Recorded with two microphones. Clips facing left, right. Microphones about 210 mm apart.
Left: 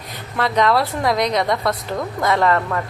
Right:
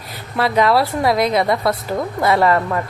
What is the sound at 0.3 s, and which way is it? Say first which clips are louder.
A woman's voice: right 2 dB; 5° right (ahead or behind).